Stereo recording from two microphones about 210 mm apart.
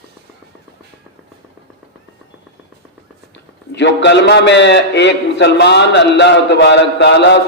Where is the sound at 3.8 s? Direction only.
55° left (ahead or behind).